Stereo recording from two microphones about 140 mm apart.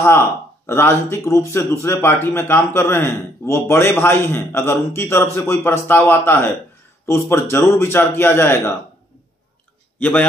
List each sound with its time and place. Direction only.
0.0 s speech: 20° left (ahead or behind)
9.9 s speech: 10° left (ahead or behind)